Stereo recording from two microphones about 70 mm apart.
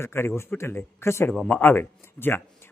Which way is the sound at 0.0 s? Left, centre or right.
Left.